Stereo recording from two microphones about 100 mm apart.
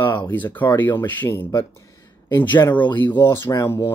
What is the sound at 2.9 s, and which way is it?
Speech, 20° left (ahead or behind).